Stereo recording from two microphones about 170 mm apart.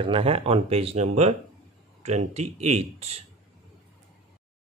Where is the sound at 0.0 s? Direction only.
35° right (ahead or behind).